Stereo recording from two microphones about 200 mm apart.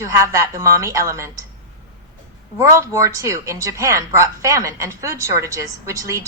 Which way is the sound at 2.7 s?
15° right (ahead or behind).